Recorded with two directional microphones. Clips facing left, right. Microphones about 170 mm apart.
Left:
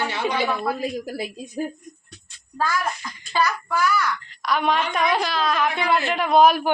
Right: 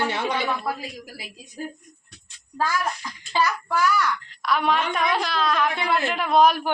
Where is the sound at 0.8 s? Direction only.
55° left (ahead or behind).